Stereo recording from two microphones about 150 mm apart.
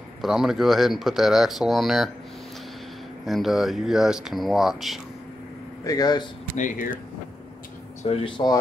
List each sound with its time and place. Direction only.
0.2 s speech: centre (ahead or behind)
3.3 s speech: centre (ahead or behind)
5.9 s speech: 25° left (ahead or behind)
6.5 s speech: 60° left (ahead or behind)
8.0 s speech: 40° left (ahead or behind)